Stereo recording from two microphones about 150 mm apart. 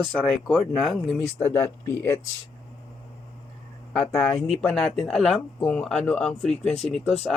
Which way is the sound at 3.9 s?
Centre (ahead or behind).